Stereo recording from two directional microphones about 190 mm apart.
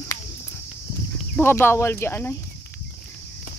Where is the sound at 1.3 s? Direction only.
10° left (ahead or behind).